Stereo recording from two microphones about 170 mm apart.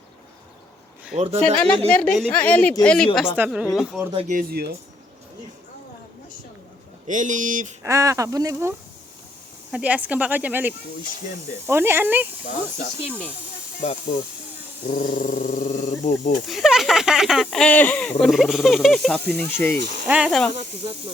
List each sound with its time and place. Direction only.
1.1 s speech: 35° right (ahead or behind)
1.5 s speech: 5° left (ahead or behind)
3.3 s speech: 10° right (ahead or behind)
4.1 s speech: 35° right (ahead or behind)
4.4 s speech: 65° right (ahead or behind)
7.1 s speech: 50° right (ahead or behind)
7.8 s speech: 20° right (ahead or behind)
9.7 s speech: 5° right (ahead or behind)
13.8 s speech: 40° left (ahead or behind)
14.8 s a sound: 50° left (ahead or behind)
16.5 s speech: centre (ahead or behind)
20.1 s speech: 5° right (ahead or behind)
20.5 s speech: 40° right (ahead or behind)